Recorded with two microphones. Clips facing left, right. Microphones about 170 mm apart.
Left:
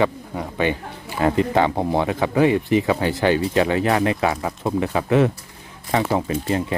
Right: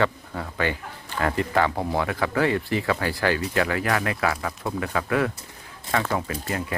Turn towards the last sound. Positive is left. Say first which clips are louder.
# left 7 dB
turn(degrees=25)  # may be behind; listen again after turning